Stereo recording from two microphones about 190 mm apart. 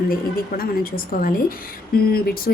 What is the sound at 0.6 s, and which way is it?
A woman's voice, 50° left (ahead or behind).